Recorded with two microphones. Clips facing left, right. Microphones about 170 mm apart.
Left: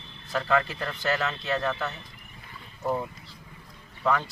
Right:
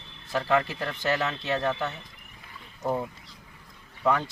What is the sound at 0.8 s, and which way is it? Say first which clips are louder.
Speech: right 1 dB; 25° right (ahead or behind).